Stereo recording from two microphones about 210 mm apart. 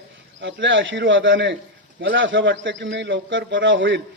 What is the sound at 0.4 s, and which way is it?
A man's voice, 60° right (ahead or behind).